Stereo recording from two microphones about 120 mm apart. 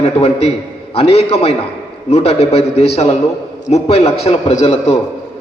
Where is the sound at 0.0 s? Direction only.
60° left (ahead or behind).